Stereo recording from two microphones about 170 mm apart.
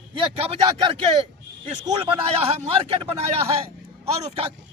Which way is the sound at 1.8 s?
25° right (ahead or behind).